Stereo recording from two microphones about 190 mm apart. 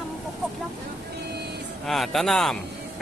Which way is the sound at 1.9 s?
Centre (ahead or behind).